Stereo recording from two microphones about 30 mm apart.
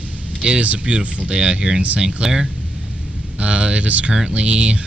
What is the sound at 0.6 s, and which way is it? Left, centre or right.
Speech, right.